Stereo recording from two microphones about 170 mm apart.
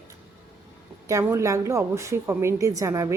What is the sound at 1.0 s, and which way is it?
A woman's voice, 15° right (ahead or behind).